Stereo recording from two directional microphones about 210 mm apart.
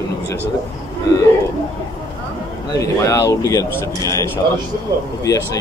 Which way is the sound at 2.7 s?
15° left (ahead or behind).